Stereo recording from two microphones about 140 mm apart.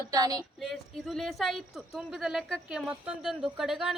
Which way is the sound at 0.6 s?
Centre (ahead or behind).